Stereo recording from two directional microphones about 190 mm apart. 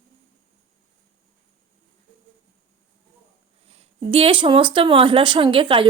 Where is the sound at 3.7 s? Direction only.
30° right (ahead or behind).